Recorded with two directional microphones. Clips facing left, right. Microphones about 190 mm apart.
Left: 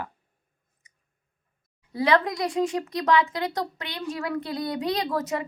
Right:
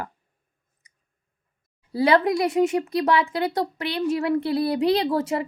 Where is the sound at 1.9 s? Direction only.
30° right (ahead or behind).